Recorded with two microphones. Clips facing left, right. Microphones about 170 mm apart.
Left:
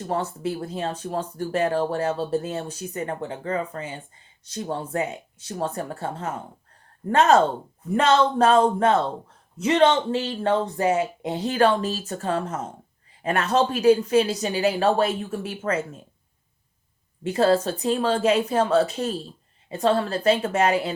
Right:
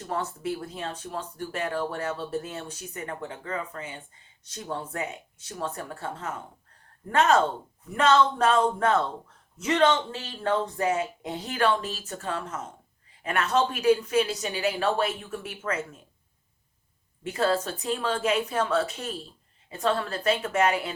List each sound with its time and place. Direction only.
0.0 s speech: 35° left (ahead or behind)
17.2 s speech: 35° left (ahead or behind)